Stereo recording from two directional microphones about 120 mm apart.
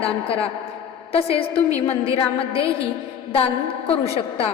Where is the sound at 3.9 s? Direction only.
50° left (ahead or behind).